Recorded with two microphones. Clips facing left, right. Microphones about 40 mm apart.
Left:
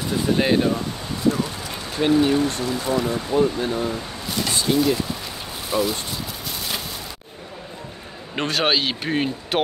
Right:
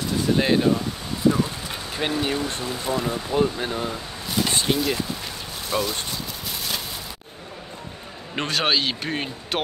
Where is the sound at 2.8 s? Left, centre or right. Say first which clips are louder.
Left 1 dB; left.